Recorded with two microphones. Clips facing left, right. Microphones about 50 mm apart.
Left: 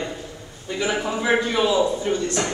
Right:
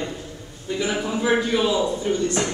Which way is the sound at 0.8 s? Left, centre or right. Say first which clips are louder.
Left 1 dB; centre.